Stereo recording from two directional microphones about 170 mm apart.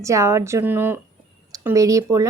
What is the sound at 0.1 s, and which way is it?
Speech, 15° right (ahead or behind).